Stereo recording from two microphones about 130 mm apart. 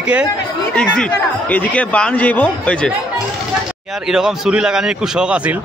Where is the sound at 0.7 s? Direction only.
10° left (ahead or behind).